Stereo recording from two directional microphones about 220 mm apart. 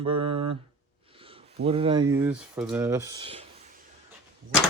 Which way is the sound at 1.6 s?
25° right (ahead or behind).